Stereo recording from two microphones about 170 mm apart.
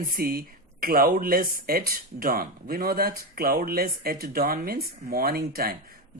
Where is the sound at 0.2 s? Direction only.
60° right (ahead or behind).